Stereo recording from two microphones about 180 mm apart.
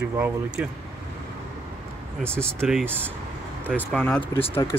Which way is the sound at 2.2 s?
5° left (ahead or behind).